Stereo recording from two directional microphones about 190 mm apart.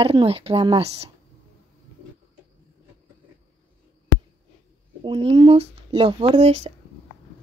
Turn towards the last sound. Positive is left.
turn(degrees=-35)  # may be behind; listen again after turning